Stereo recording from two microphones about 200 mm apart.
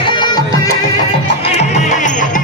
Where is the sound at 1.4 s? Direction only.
35° left (ahead or behind).